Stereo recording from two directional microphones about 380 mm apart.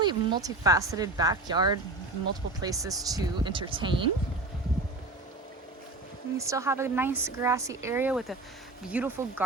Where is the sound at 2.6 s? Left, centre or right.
Centre.